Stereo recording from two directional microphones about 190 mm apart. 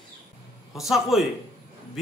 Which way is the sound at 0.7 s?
Centre (ahead or behind).